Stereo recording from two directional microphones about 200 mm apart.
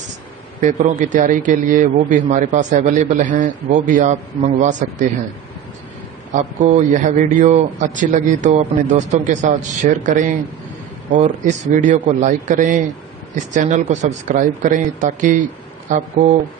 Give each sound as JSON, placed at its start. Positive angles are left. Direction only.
{"t": 0.6, "sound": "a man's voice", "side_deg": -35}
{"t": 6.3, "sound": "a man's voice", "side_deg": -35}